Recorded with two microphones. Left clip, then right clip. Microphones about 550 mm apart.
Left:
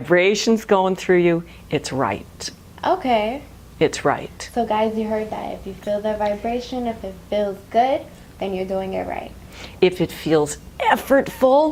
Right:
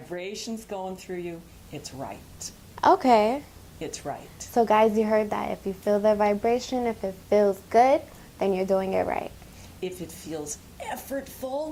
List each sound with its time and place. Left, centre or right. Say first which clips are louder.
0.1 s speech: left 19 dB; left
2.8 s a woman's voice: even; right
3.8 s a woman's voice: left 16 dB; left
4.5 s a woman's voice: even; right
9.8 s a woman's voice: left 17 dB; left